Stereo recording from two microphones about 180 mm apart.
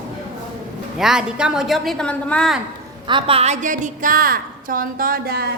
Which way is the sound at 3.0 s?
30° right (ahead or behind).